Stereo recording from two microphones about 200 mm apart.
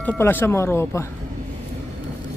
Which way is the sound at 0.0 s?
10° left (ahead or behind).